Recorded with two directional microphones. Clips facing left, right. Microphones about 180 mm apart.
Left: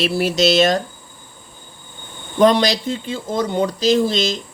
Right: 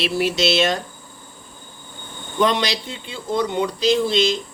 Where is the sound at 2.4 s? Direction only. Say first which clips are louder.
Left 6 dB; 40° left (ahead or behind).